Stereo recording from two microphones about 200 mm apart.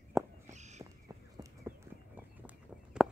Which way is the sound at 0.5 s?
35° right (ahead or behind).